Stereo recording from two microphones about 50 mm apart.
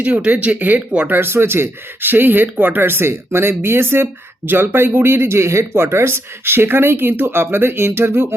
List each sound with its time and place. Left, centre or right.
0.3 s speech: right
1.0 s speech: right